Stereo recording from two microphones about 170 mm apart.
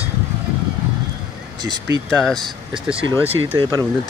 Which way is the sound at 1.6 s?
25° right (ahead or behind).